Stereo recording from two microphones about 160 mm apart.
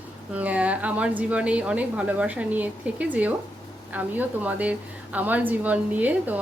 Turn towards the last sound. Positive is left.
turn(degrees=-10)  # may be behind; listen again after turning